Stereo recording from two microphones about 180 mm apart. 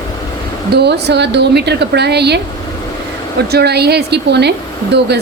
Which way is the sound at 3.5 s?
65° right (ahead or behind).